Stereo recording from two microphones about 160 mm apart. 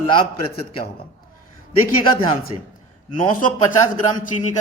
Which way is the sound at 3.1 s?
55° left (ahead or behind).